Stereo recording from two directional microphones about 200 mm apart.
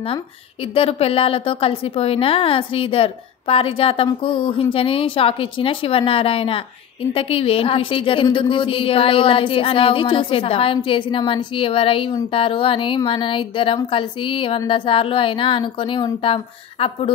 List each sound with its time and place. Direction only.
0.7 s a woman's voice: 30° left (ahead or behind)